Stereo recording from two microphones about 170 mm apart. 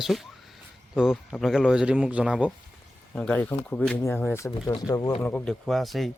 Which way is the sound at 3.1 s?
10° left (ahead or behind).